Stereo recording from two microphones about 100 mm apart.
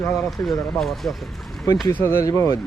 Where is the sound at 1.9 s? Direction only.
25° left (ahead or behind).